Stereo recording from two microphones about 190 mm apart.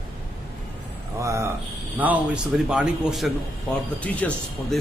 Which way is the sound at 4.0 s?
5° left (ahead or behind).